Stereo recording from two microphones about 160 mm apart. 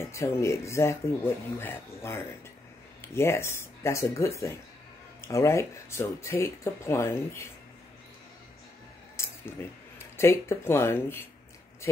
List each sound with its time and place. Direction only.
0.0 s speech: 20° left (ahead or behind)
9.2 s a sound: 15° left (ahead or behind)
9.9 s speech: 15° left (ahead or behind)